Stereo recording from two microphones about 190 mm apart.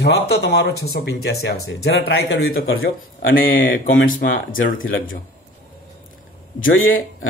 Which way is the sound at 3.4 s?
90° left.